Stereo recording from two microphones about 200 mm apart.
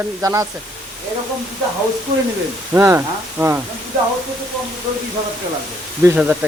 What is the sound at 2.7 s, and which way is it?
Speech, 15° right (ahead or behind).